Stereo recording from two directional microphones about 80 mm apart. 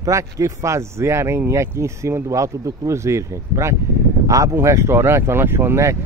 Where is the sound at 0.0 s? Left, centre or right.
Right.